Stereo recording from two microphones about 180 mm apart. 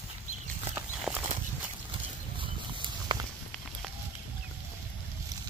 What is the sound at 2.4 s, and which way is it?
Horse, 25° right (ahead or behind).